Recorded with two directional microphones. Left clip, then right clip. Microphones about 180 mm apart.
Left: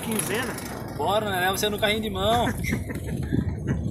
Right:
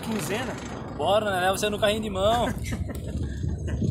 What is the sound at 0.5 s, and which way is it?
Speech, 45° left (ahead or behind).